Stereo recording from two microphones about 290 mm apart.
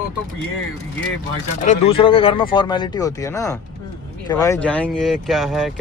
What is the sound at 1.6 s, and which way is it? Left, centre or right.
Speech, left.